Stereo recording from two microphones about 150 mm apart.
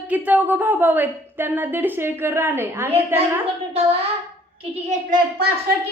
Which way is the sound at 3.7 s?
40° right (ahead or behind).